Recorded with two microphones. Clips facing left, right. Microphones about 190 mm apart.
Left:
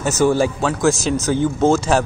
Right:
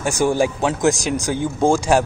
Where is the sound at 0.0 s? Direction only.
15° right (ahead or behind).